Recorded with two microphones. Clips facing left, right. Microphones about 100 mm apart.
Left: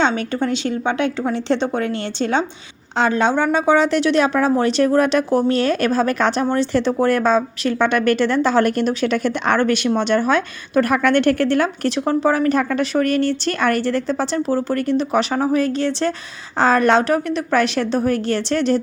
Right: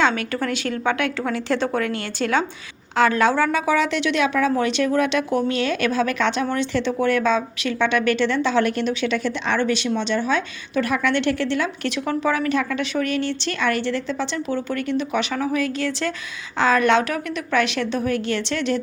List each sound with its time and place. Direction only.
0.0 s a woman's voice: 25° left (ahead or behind); by 11.9 s 45° left (ahead or behind)
11.9 s a woman's voice: 35° left (ahead or behind)